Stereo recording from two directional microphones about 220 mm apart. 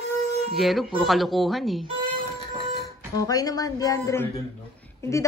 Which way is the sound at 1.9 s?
20° right (ahead or behind).